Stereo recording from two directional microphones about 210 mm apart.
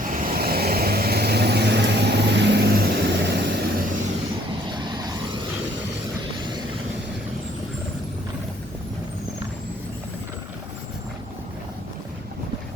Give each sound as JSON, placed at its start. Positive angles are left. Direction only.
{"t": 0.1, "sound": "vehicle", "side_deg": -40}
{"t": 4.6, "sound": "vehicle", "side_deg": -20}